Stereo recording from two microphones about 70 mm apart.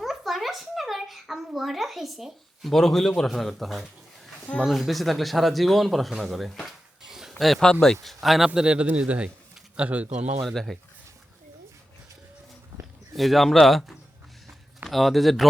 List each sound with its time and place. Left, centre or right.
0.0 s speech: centre
8.0 s speech: centre
8.4 s a man's voice: centre
10.4 s speech: centre
13.1 s speech: centre